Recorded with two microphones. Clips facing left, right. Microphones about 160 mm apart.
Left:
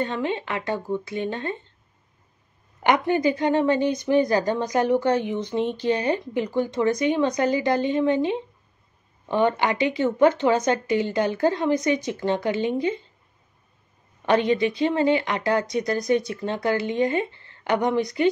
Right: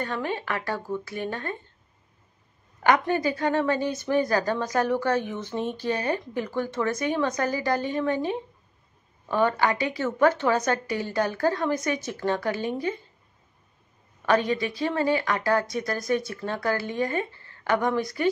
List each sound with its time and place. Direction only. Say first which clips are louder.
0.0 s speech: left 4 dB; 20° left (ahead or behind)
2.8 s speech: left 2 dB; 20° left (ahead or behind)
14.2 s speech: left 3 dB; 25° left (ahead or behind)